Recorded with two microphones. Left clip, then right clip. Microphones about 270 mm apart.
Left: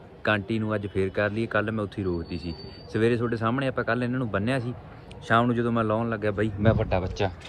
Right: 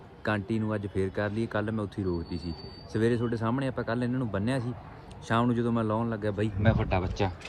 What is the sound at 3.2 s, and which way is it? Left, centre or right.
Speech, centre.